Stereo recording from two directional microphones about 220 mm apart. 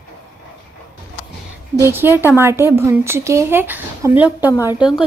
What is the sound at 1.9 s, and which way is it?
A woman's voice, 10° right (ahead or behind).